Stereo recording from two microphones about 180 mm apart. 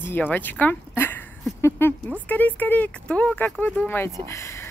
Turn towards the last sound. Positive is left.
turn(degrees=15)  # may be behind; listen again after turning